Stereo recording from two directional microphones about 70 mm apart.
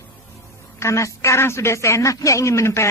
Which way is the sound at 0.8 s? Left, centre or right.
Left.